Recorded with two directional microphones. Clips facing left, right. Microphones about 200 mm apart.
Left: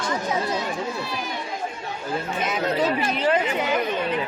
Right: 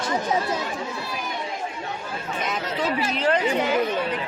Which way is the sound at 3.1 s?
Centre (ahead or behind).